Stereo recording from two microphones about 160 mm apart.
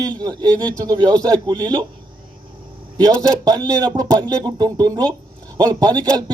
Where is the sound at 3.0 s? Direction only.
25° right (ahead or behind).